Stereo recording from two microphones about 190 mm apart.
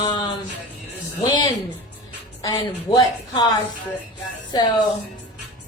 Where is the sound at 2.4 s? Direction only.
20° left (ahead or behind).